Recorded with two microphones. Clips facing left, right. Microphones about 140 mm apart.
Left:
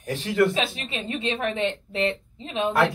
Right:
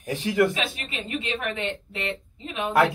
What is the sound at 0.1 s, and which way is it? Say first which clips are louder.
Speech: even; 15° right (ahead or behind).